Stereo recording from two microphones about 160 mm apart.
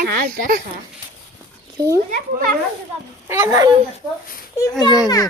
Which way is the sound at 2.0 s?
55° right (ahead or behind).